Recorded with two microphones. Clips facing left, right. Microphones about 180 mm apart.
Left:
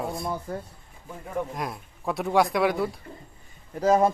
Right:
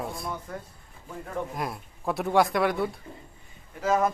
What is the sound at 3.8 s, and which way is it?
Speech, 35° left (ahead or behind).